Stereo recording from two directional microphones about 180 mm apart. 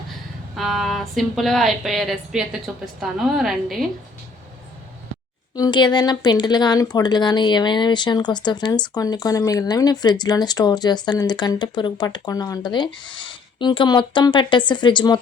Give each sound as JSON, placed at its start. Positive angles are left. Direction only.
{"t": 0.5, "sound": "speech", "side_deg": 0}
{"t": 5.5, "sound": "speech", "side_deg": 25}